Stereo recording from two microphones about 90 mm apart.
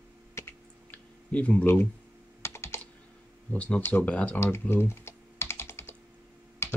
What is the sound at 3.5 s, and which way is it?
Speech, 15° left (ahead or behind).